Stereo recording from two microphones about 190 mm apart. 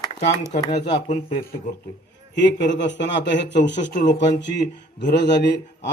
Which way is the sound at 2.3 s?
65° left (ahead or behind).